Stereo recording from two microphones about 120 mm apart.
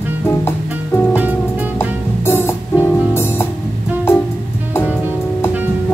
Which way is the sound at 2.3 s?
20° left (ahead or behind).